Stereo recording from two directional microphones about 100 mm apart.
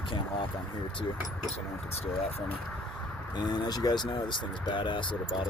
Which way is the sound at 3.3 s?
45° left (ahead or behind).